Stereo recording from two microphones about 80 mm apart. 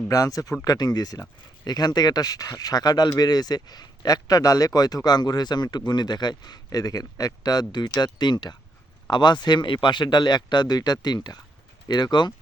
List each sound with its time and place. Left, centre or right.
0.1 s speech: left